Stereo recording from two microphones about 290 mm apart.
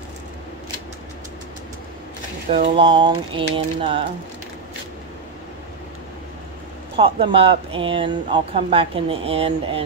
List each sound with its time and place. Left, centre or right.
2.7 s speech: centre
7.0 s speech: centre